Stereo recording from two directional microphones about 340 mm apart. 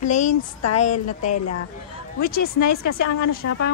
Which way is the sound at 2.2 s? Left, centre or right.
Left.